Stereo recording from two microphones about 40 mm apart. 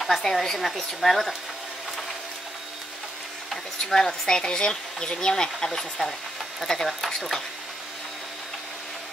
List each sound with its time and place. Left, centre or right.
0.2 s a woman's voice: centre
3.8 s speech: centre